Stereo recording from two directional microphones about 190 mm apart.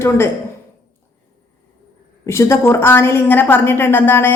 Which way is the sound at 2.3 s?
15° left (ahead or behind).